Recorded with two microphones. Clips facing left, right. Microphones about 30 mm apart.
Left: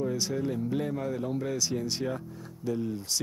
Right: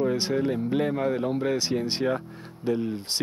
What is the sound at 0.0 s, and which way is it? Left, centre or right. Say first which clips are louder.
Speech: right 5 dB; right.